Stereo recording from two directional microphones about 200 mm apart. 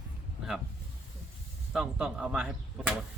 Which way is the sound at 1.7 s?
5° right (ahead or behind).